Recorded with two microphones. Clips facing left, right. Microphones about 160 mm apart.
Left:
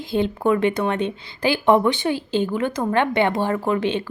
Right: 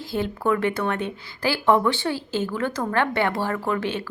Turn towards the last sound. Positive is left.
turn(degrees=20)  # may be behind; listen again after turning